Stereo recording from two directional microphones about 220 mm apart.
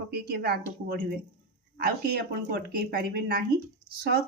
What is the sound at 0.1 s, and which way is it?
Speech, 45° right (ahead or behind).